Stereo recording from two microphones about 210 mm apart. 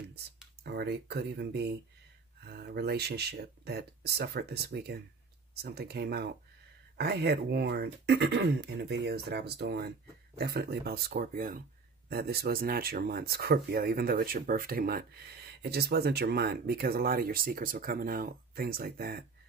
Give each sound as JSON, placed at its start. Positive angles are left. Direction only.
{"t": 0.7, "sound": "speech", "side_deg": -50}